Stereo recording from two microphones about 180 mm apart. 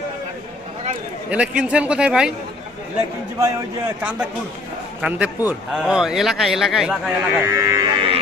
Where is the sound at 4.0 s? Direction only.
5° right (ahead or behind).